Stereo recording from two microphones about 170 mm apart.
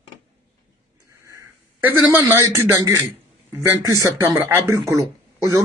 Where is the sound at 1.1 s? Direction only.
15° right (ahead or behind).